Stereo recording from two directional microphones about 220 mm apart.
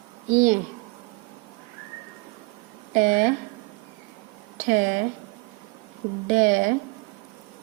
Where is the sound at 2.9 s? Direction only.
35° right (ahead or behind).